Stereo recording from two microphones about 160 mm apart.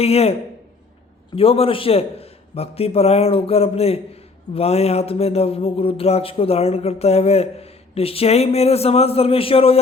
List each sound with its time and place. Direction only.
0.0 s speech: 40° left (ahead or behind)
1.4 s speech: 35° left (ahead or behind)